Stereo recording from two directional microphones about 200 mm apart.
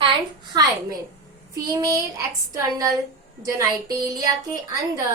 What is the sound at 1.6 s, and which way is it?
Child singing, 15° right (ahead or behind).